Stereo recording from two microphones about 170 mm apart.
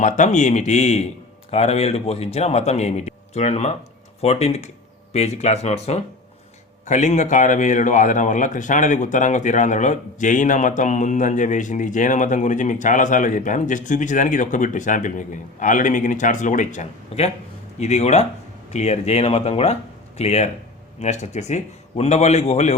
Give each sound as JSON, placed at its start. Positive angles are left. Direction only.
{"t": 0.0, "sound": "a man's voice", "side_deg": 45}